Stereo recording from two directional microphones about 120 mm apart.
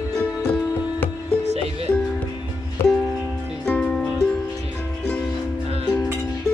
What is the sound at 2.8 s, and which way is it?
Music, 20° left (ahead or behind).